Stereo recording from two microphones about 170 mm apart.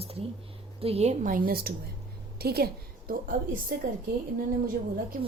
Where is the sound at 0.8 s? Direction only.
35° right (ahead or behind).